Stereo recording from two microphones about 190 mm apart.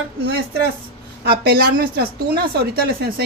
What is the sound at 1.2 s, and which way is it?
Speech, 55° right (ahead or behind).